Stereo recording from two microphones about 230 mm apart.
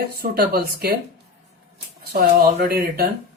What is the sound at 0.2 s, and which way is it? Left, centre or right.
Speech, right.